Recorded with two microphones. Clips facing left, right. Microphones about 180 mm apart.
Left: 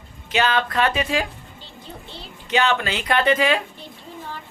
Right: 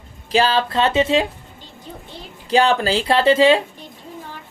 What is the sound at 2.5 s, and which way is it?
A woman's voice, 35° right (ahead or behind).